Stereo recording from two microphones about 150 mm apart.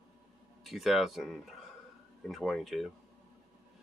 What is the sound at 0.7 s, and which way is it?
Speech, centre (ahead or behind).